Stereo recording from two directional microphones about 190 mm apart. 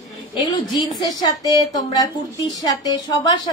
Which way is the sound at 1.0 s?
20° left (ahead or behind).